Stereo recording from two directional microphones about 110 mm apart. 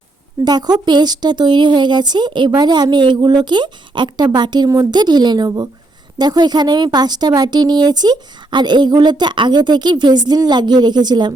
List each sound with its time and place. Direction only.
0.4 s a woman's voice: 35° right (ahead or behind)